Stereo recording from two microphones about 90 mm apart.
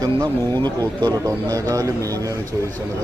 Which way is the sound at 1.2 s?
40° right (ahead or behind).